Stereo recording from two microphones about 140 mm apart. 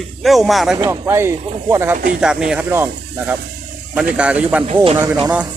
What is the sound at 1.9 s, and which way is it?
Speech, 80° right.